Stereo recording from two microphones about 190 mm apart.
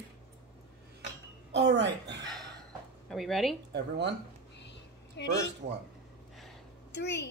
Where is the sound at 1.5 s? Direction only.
65° right (ahead or behind).